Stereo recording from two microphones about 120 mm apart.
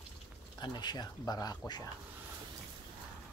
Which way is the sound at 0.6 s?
35° left (ahead or behind).